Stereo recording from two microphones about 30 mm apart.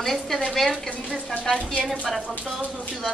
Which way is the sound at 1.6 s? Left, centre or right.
Left.